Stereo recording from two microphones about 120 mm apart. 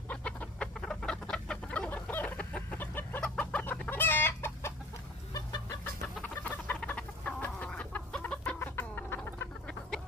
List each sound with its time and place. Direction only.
0.1 s chicken: 10° left (ahead or behind); by 5.8 s 30° left (ahead or behind)
6.2 s chicken: 10° left (ahead or behind)